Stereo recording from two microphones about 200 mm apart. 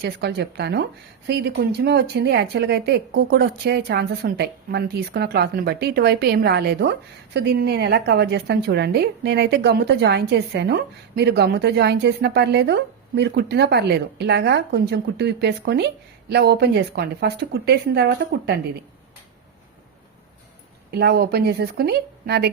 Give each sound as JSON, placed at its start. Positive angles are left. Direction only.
{"t": 0.0, "sound": "a woman's voice", "side_deg": -55}
{"t": 20.9, "sound": "speech", "side_deg": -55}